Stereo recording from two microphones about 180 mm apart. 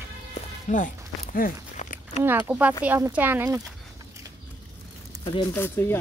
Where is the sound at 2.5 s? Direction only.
10° right (ahead or behind).